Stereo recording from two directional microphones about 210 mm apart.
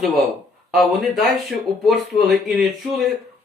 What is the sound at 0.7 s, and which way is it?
Speech, centre (ahead or behind).